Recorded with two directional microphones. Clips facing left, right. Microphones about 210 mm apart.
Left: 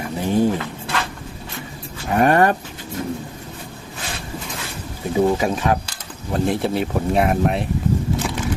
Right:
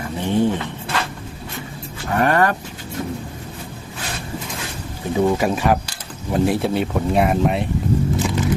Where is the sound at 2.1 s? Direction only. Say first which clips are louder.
Left 2 dB; 20° left (ahead or behind).